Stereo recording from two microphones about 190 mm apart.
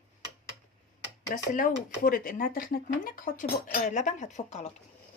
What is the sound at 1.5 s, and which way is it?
Speech, 50° left (ahead or behind).